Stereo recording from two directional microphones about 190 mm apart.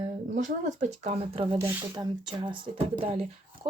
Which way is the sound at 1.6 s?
10° right (ahead or behind).